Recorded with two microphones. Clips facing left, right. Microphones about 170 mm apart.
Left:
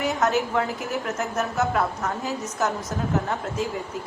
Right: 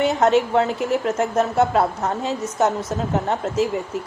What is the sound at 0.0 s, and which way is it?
A woman's voice, 25° right (ahead or behind).